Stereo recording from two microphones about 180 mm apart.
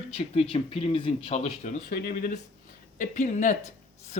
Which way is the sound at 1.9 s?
50° left (ahead or behind).